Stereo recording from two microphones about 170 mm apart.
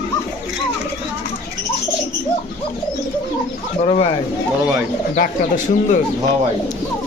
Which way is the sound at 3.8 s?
35° left (ahead or behind).